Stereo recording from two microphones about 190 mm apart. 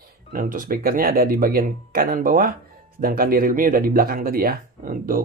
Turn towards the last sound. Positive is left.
turn(degrees=-45)  # may be behind; listen again after turning